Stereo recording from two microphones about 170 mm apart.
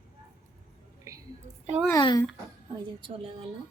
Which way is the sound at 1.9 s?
20° left (ahead or behind).